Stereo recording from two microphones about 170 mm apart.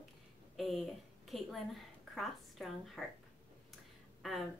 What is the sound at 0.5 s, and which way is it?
A woman's voice, centre (ahead or behind).